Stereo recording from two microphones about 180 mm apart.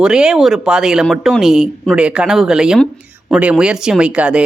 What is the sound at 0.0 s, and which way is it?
Speech, 5° right (ahead or behind).